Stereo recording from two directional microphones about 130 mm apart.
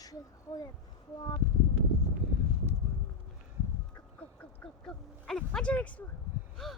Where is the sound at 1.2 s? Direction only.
40° left (ahead or behind).